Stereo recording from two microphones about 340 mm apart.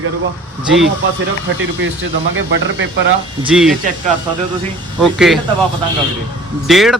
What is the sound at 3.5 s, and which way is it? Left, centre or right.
Speech, centre.